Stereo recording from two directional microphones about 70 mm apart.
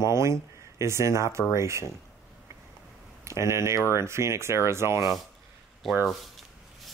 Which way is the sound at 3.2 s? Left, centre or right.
Right.